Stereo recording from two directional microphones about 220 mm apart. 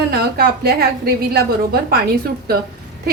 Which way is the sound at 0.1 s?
45° right (ahead or behind).